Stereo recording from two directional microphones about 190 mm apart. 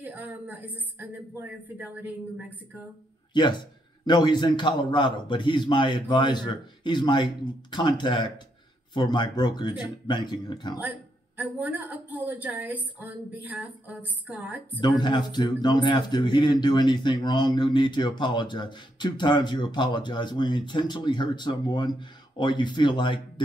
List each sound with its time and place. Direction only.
0.0 s a woman's voice: 10° right (ahead or behind)
3.3 s speech: 25° left (ahead or behind)
11.3 s a woman's voice: 10° right (ahead or behind)
14.8 s speech: 25° left (ahead or behind)